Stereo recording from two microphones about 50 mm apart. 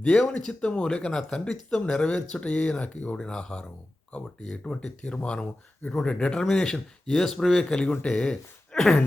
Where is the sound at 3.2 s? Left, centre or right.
Centre.